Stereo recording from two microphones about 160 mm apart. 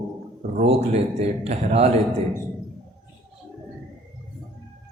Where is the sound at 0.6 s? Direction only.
40° right (ahead or behind).